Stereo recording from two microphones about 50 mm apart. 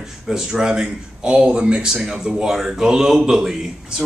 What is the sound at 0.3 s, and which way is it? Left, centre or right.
A man's voice, centre.